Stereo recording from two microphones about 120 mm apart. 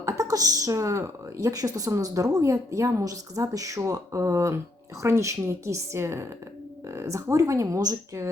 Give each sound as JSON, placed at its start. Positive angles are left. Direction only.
{"t": 0.0, "sound": "speech", "side_deg": -30}